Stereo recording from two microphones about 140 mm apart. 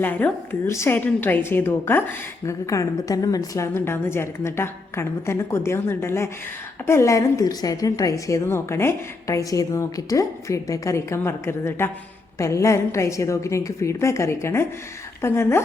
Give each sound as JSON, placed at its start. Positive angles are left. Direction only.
{"t": 0.0, "sound": "a woman's voice", "side_deg": 15}